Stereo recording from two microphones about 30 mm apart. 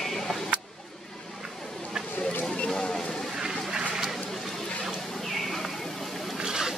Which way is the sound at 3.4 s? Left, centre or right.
Centre.